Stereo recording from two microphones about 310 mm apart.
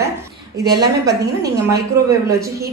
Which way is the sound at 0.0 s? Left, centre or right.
Centre.